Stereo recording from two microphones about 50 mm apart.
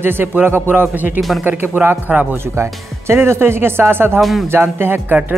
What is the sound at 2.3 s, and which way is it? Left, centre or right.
Speech, right.